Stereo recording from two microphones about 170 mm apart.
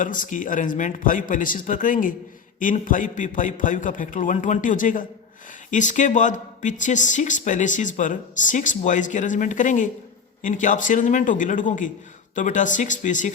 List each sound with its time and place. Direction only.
0.0 s speech: 50° left (ahead or behind)